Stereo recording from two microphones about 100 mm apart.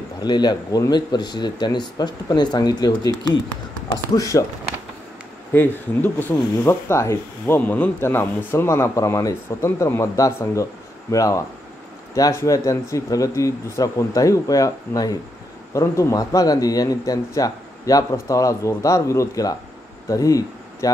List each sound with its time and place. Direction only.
0.2 s speech: 45° left (ahead or behind)
4.1 s speech: 35° left (ahead or behind)
5.5 s speech: 20° left (ahead or behind)